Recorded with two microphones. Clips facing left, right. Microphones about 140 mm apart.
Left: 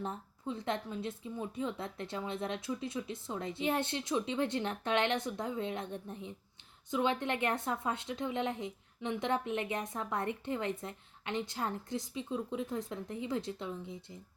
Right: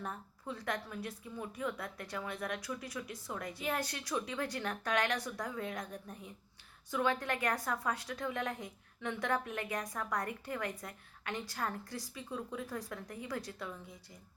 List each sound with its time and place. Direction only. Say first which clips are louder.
0.0 s a woman's voice: left 4 dB; 25° left (ahead or behind)